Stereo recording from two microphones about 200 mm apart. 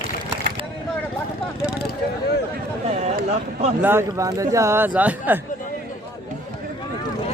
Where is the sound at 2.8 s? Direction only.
35° right (ahead or behind).